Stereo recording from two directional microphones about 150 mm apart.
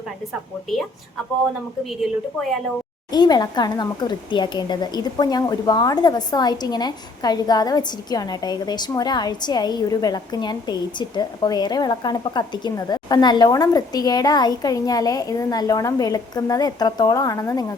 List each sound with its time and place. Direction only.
1.9 s a woman's voice: centre (ahead or behind)
3.1 s speech: 25° left (ahead or behind)